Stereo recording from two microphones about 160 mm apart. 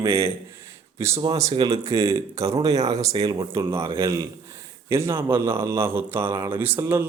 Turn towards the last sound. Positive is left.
turn(degrees=-15)  # may be behind; listen again after turning